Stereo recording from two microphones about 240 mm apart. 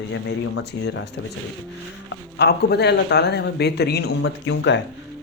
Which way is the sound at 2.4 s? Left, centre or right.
Left.